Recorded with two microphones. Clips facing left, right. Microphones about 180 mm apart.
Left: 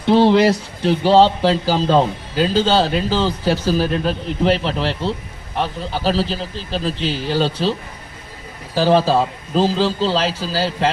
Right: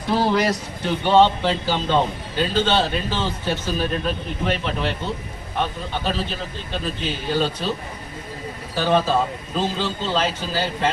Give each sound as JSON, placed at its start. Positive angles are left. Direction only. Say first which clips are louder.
{"t": 0.0, "sound": "a man's voice", "louder": "left 7 dB", "side_deg": 25}